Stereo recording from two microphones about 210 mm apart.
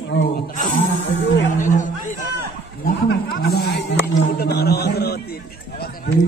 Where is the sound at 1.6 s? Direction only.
35° left (ahead or behind).